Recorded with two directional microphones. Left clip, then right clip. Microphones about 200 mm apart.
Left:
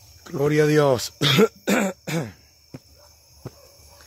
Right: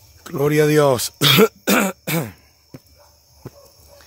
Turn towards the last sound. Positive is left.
turn(degrees=10)  # may be behind; listen again after turning